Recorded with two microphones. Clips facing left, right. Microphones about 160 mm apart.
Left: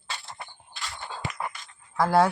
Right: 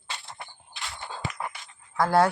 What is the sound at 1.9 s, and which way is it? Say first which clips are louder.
Speech: even; centre (ahead or behind).